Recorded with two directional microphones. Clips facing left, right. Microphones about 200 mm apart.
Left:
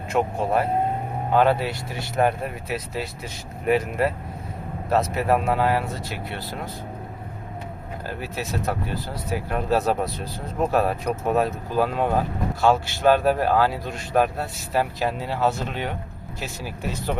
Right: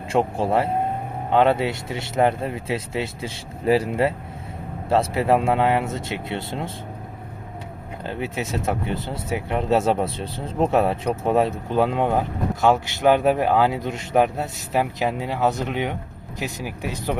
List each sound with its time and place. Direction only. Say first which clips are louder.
0.1 s speech: right 2 dB; 30° right (ahead or behind)
8.0 s speech: right 4 dB; 25° right (ahead or behind)